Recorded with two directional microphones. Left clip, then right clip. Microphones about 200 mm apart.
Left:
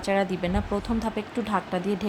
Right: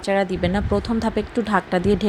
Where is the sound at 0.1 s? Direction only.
20° right (ahead or behind).